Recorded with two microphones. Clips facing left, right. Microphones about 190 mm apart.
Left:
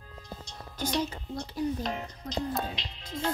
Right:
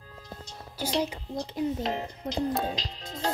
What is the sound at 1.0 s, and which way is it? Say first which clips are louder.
Speech: right 2 dB; 15° right (ahead or behind).